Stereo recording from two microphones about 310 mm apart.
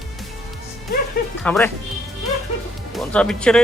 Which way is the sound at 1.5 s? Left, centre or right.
Centre.